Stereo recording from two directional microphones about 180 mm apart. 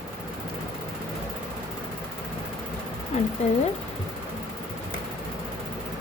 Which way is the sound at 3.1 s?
35° left (ahead or behind).